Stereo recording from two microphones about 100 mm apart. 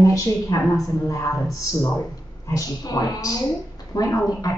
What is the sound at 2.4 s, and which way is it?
A woman's voice, 35° left (ahead or behind).